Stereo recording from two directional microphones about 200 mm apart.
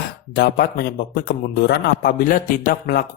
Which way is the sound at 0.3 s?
50° left (ahead or behind).